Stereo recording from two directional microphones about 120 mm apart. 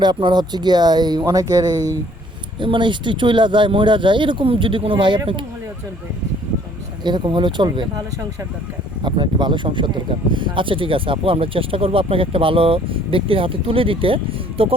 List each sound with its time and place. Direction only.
0.0 s speech: 40° right (ahead or behind)
7.0 s speech: 40° right (ahead or behind)
9.0 s speech: 40° right (ahead or behind)